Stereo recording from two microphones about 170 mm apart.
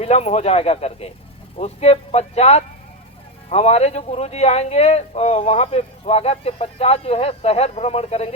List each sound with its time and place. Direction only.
0.0 s a man's voice: 40° left (ahead or behind)